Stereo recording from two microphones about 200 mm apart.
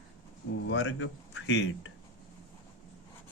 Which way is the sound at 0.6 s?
70° left (ahead or behind).